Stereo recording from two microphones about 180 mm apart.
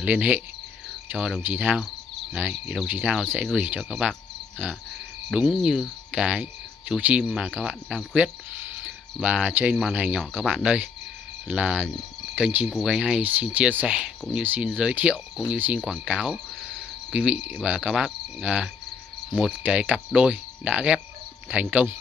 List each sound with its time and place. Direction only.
0.0 s speech: 10° right (ahead or behind)
3.3 s cricket: 5° right (ahead or behind)
5.3 s speech: 5° right (ahead or behind)